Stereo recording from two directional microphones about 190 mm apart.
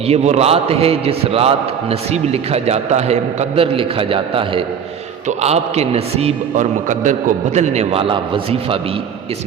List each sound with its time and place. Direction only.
0.1 s a man's voice: 35° right (ahead or behind)